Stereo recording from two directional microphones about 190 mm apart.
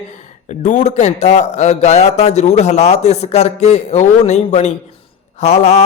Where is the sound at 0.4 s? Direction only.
40° left (ahead or behind).